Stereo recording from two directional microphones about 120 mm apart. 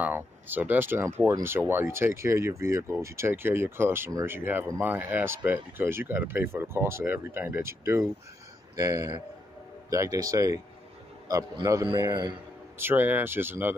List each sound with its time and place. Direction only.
0.0 s speech: 15° right (ahead or behind)
11.6 s speech: 30° right (ahead or behind)
12.7 s speech: 20° right (ahead or behind)